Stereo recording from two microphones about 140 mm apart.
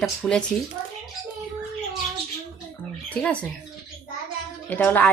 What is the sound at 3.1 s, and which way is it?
Speech, 10° left (ahead or behind).